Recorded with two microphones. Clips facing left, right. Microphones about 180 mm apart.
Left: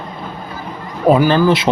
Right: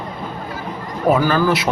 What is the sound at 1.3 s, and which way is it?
Speech, 25° left (ahead or behind).